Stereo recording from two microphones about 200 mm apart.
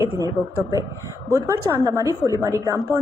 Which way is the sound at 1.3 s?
15° right (ahead or behind).